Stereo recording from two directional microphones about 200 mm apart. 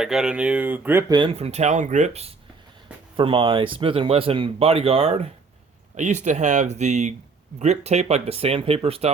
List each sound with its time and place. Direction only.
0.0 s speech: 5° right (ahead or behind)
1.1 s speech: 25° right (ahead or behind)